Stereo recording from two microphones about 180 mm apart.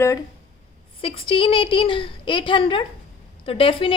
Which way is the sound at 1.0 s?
30° left (ahead or behind).